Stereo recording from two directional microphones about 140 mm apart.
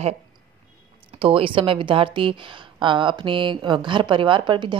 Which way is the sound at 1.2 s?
40° right (ahead or behind).